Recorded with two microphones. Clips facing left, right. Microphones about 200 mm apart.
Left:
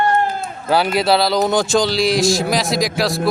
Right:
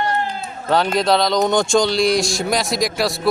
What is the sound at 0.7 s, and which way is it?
Speech, 5° left (ahead or behind).